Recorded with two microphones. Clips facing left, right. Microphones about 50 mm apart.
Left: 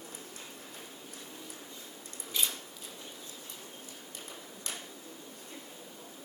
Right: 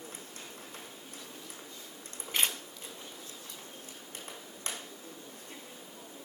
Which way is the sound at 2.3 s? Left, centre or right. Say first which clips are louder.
Right 3 dB; right.